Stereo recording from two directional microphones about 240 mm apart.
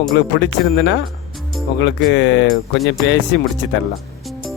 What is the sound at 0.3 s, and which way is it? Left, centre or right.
Speech, left.